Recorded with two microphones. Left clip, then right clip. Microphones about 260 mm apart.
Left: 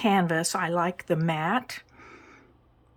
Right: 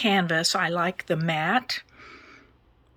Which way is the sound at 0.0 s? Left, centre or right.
Centre.